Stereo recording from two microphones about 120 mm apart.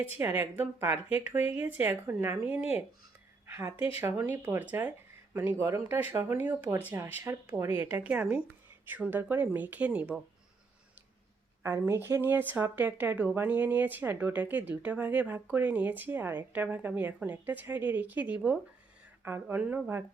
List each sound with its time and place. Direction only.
0.2 s speech: 15° right (ahead or behind)
3.4 s a sound: 20° right (ahead or behind)
3.8 s speech: 50° left (ahead or behind)
4.0 s speech: 15° right (ahead or behind)
11.6 s speech: 20° right (ahead or behind)